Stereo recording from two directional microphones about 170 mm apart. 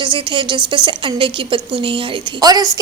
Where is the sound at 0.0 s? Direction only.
30° right (ahead or behind).